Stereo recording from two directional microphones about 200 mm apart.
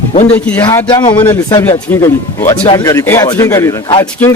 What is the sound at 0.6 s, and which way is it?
A man's voice, 20° left (ahead or behind).